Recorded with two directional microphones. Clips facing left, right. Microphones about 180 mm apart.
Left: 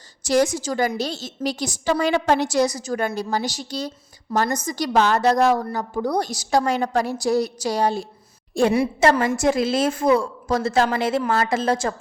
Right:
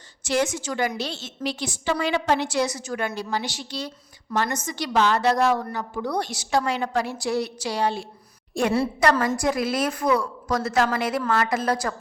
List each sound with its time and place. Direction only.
0.2 s a woman's voice: 40° left (ahead or behind)
8.7 s a woman's voice: 20° left (ahead or behind)